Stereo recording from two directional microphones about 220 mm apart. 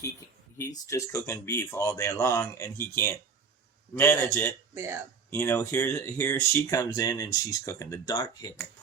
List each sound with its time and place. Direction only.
0.7 s speech: 15° left (ahead or behind)
4.7 s speech: 10° right (ahead or behind)
5.3 s speech: 10° left (ahead or behind)